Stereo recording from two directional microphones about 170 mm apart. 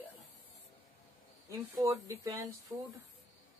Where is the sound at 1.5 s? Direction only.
20° right (ahead or behind).